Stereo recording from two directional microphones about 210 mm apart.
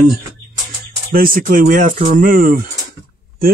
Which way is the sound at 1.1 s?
40° right (ahead or behind).